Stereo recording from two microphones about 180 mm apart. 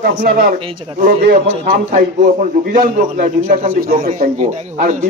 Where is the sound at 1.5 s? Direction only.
35° right (ahead or behind).